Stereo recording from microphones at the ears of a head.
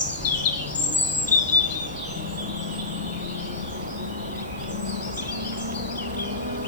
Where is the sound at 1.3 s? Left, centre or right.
Left.